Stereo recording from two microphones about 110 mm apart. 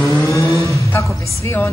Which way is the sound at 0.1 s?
25° left (ahead or behind).